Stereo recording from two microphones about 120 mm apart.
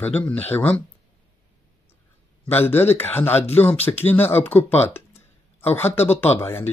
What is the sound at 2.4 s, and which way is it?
Speech, 20° left (ahead or behind).